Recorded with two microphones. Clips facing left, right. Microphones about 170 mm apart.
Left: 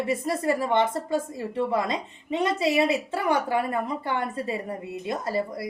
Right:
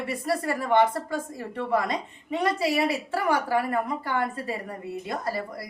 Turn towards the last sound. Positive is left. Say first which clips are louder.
# left 3 dB
turn(degrees=25)  # may be behind; listen again after turning